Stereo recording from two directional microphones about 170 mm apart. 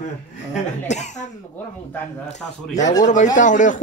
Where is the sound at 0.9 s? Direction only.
45° left (ahead or behind).